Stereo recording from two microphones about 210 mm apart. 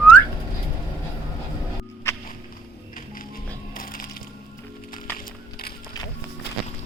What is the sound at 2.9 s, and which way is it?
Music, 40° left (ahead or behind).